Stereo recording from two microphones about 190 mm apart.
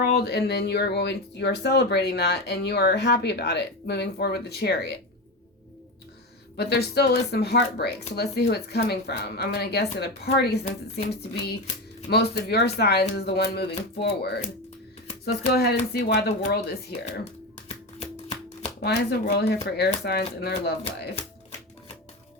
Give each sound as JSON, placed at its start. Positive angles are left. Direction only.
{"t": 0.0, "sound": "speech", "side_deg": 55}
{"t": 6.6, "sound": "speech", "side_deg": 60}
{"t": 18.8, "sound": "speech", "side_deg": 60}